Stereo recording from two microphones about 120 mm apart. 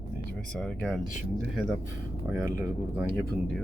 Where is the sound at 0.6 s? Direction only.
10° left (ahead or behind).